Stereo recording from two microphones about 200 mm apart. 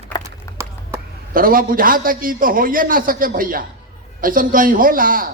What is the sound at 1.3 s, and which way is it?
A man's voice, 45° right (ahead or behind).